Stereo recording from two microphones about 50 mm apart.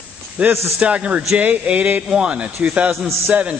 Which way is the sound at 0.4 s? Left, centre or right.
Right.